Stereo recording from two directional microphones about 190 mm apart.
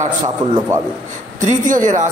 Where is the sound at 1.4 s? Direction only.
40° right (ahead or behind).